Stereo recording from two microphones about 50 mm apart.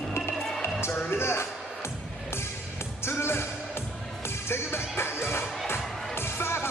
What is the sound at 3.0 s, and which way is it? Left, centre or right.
Music, left.